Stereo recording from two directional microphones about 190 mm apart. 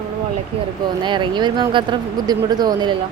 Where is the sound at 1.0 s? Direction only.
25° right (ahead or behind).